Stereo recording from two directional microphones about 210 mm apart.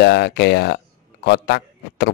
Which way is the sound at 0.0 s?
55° left (ahead or behind).